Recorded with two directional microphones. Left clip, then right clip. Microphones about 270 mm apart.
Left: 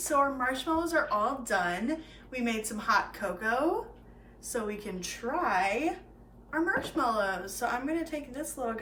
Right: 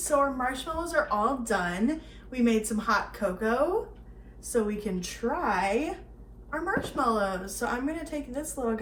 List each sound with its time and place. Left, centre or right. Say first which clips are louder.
0.2 s a woman's voice: right 1 dB; centre